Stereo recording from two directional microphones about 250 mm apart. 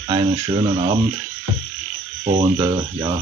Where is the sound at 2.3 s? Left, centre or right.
Right.